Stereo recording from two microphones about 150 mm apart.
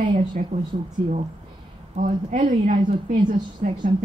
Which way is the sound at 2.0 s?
60° right (ahead or behind).